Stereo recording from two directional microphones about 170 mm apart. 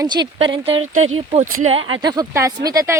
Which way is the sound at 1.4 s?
50° right (ahead or behind).